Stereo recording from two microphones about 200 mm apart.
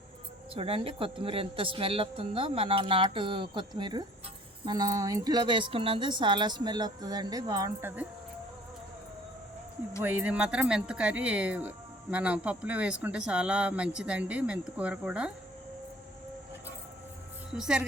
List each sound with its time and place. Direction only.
0.5 s speech: 30° right (ahead or behind); by 8.0 s 10° right (ahead or behind)
10.0 s speech: 10° right (ahead or behind)
17.5 s a woman's voice: 5° right (ahead or behind)